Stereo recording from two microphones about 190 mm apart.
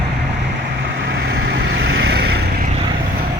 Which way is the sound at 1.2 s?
65° right (ahead or behind).